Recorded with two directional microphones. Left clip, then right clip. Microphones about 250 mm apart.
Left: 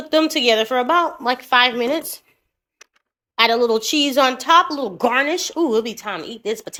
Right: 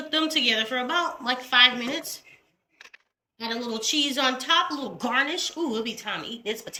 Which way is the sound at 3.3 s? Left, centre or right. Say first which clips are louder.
Left 16 dB; centre.